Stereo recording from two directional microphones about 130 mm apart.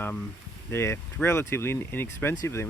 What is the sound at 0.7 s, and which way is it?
Speech, 20° left (ahead or behind).